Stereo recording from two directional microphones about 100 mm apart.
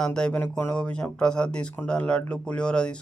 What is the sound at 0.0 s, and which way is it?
Speech, 5° left (ahead or behind).